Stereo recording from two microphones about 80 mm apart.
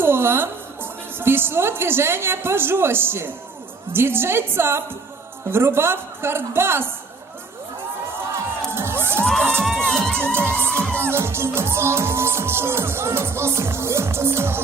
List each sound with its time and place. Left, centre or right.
0.0 s a woman's voice: right
5.5 s music: right
8.7 s crowd: right
9.2 s crowd: centre
10.6 s music: right